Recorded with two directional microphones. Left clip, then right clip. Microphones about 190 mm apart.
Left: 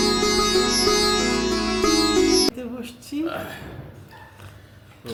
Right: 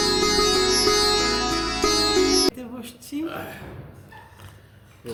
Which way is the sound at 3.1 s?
20° right (ahead or behind).